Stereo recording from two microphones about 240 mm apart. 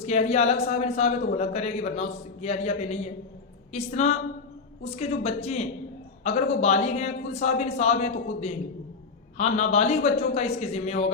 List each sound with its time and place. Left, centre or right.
0.0 s a man's voice: left